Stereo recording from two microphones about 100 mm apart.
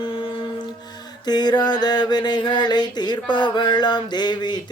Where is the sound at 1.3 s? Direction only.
45° left (ahead or behind).